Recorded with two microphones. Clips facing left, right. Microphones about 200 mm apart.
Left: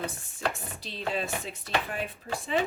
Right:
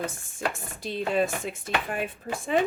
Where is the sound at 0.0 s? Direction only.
50° right (ahead or behind).